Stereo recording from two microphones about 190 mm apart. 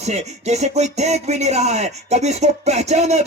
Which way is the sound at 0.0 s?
35° right (ahead or behind).